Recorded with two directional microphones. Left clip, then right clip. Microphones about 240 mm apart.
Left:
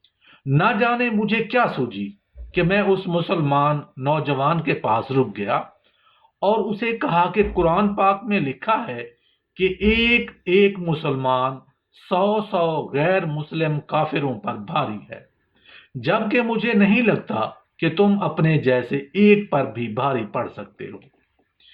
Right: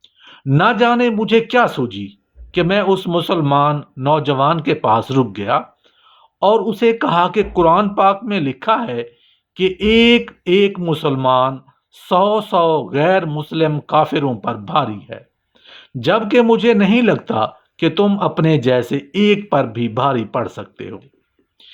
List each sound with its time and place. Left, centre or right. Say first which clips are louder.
0.3 s speech: right 5 dB; right